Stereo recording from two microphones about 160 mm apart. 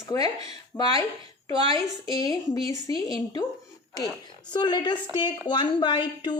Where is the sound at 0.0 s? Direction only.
20° left (ahead or behind).